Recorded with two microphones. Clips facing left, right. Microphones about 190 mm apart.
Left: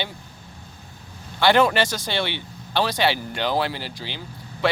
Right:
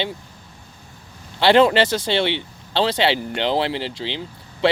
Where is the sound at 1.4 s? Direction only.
25° right (ahead or behind).